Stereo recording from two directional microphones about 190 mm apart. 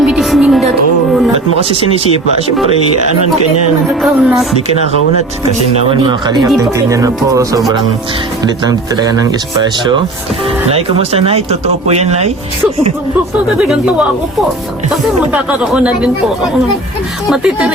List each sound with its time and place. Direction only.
0.0 s a sound: 5° right (ahead or behind)
4.0 s speech: centre (ahead or behind)
5.9 s speech: 25° right (ahead or behind)
10.7 s speech: 30° right (ahead or behind)
13.6 s speech: 5° right (ahead or behind)
15.3 s speech: 5° right (ahead or behind)
17.2 s speech: 5° right (ahead or behind)